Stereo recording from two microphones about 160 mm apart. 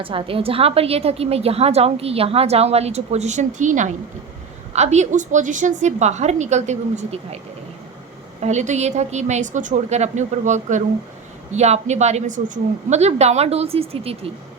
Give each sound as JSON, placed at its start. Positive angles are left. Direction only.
{"t": 0.0, "sound": "a woman's voice", "side_deg": -35}
{"t": 8.4, "sound": "a woman's voice", "side_deg": -45}